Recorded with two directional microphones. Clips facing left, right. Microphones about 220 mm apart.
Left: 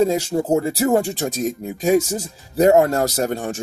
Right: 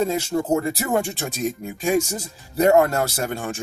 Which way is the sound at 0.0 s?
35° left (ahead or behind).